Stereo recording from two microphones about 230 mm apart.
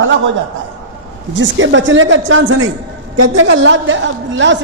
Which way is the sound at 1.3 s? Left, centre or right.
Right.